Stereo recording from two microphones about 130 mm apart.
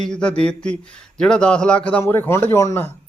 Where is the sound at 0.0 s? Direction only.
5° left (ahead or behind).